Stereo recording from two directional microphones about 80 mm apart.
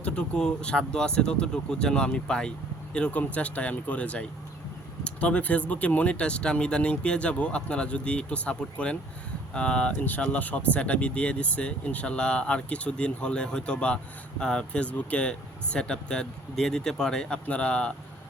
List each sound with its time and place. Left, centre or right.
0.0 s speech: centre